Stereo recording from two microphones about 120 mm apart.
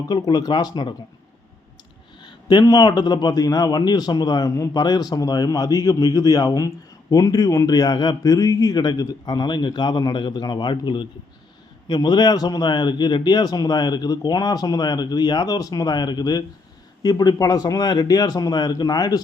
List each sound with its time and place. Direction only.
0.0 s a man's voice: 30° left (ahead or behind)
2.2 s a man's voice: 35° left (ahead or behind)